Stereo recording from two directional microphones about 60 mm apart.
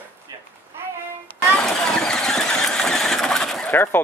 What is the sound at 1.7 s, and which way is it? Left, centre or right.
Vehicle, centre.